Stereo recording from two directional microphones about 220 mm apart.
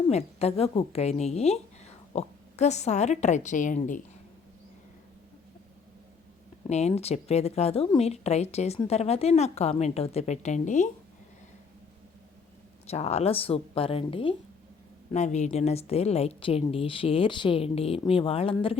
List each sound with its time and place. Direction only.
0.1 s a woman's voice: 30° left (ahead or behind)
6.7 s a woman's voice: 30° left (ahead or behind)
12.9 s a woman's voice: 30° left (ahead or behind)